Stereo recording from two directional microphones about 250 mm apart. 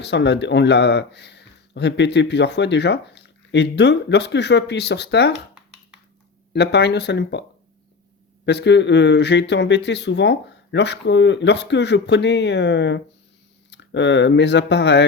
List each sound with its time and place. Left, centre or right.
0.0 s speech: left
6.5 s speech: left
8.4 s speech: left